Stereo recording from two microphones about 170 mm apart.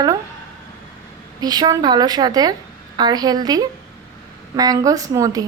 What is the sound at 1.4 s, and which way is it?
A woman's voice, 25° right (ahead or behind).